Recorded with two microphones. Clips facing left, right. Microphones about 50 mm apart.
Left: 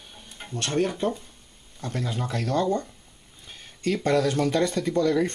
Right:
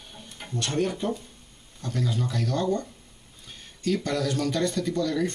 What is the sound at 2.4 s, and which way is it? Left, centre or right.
Speech, left.